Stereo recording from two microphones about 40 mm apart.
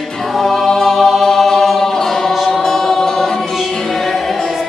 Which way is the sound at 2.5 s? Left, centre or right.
Centre.